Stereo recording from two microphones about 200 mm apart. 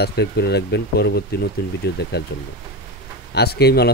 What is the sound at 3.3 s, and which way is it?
Speech, 55° left (ahead or behind).